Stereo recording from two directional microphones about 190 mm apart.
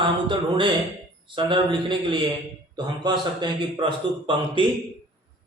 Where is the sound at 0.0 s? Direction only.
25° right (ahead or behind).